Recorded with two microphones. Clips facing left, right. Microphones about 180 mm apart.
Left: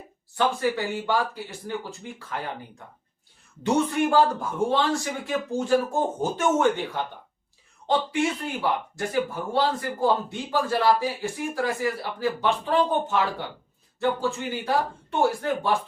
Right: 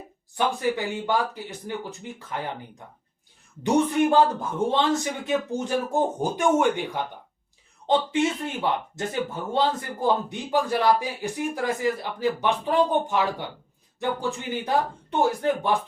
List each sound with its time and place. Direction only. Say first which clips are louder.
0.3 s a man's voice: left 1 dB; 15° right (ahead or behind)
8.6 s a man's voice: even; 20° right (ahead or behind)